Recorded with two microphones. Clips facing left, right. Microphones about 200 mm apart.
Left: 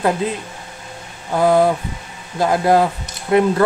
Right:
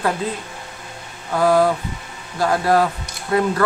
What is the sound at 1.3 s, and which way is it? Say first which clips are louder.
Speech: left 2 dB; 20° left (ahead or behind).